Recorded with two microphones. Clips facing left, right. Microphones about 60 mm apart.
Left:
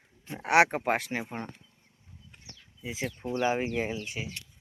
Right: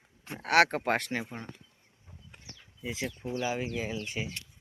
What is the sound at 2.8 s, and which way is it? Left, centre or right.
Speech, centre.